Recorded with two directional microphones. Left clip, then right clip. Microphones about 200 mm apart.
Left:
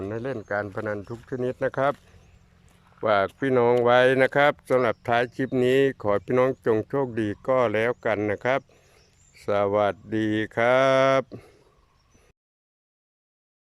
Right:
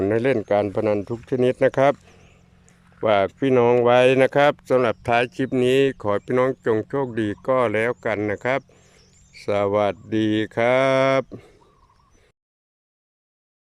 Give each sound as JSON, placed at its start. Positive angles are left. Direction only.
{"t": 0.0, "sound": "speech", "side_deg": -25}